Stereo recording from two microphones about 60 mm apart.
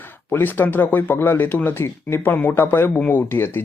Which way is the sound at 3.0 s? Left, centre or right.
Left.